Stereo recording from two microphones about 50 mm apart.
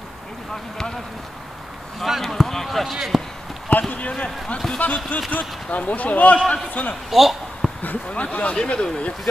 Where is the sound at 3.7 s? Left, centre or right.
Left.